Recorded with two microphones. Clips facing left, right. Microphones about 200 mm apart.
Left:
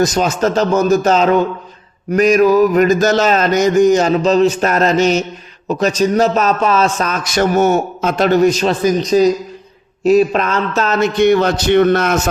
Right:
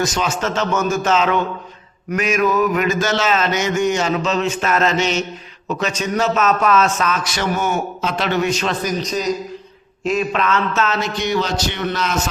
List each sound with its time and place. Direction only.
0.0 s a man's voice: 35° left (ahead or behind)
11.0 s a man's voice: 55° left (ahead or behind)